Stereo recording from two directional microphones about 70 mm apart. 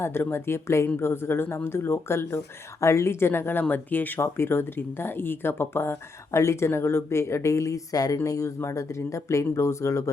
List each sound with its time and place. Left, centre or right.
0.0 s speech: left
4.2 s speech: left
8.2 s speech: left